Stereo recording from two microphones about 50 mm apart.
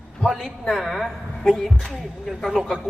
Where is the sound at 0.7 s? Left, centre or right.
Centre.